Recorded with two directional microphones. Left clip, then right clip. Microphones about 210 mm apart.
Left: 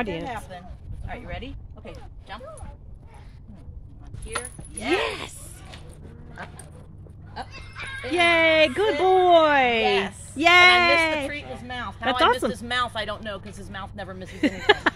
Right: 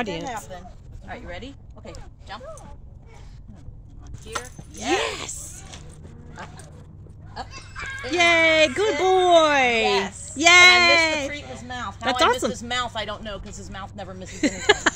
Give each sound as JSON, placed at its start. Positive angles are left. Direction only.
{"t": 0.0, "sound": "speech", "side_deg": 5}
{"t": 1.9, "sound": "speech", "side_deg": 0}
{"t": 4.3, "sound": "speech", "side_deg": 5}
{"t": 7.5, "sound": "speech", "side_deg": -55}
{"t": 8.1, "sound": "speech", "side_deg": 5}